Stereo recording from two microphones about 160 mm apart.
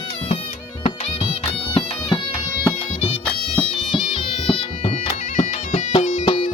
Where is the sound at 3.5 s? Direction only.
5° left (ahead or behind).